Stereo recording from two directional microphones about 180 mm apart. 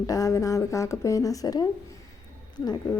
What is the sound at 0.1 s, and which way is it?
Speech, 20° left (ahead or behind).